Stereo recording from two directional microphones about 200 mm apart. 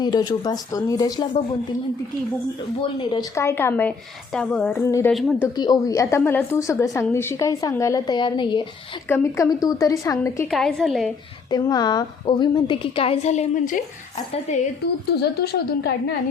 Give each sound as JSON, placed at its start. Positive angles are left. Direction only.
{"t": 0.0, "sound": "a woman's voice", "side_deg": 20}
{"t": 3.0, "sound": "a woman's voice", "side_deg": 20}
{"t": 5.1, "sound": "a woman's voice", "side_deg": 0}
{"t": 5.5, "sound": "a woman's voice", "side_deg": 20}
{"t": 9.0, "sound": "a woman's voice", "side_deg": 15}
{"t": 10.5, "sound": "a woman's voice", "side_deg": 0}
{"t": 11.5, "sound": "a woman's voice", "side_deg": 20}
{"t": 15.1, "sound": "a woman's voice", "side_deg": 55}